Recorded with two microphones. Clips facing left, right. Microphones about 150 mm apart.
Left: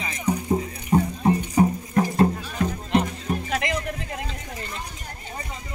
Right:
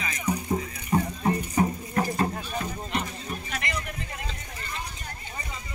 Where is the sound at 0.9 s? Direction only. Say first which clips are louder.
Left 5 dB; 25° left (ahead or behind).